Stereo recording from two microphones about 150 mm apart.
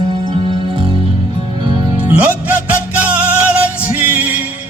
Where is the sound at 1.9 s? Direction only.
10° right (ahead or behind).